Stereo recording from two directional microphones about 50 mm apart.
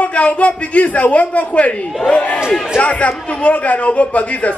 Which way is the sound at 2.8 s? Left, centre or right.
Left.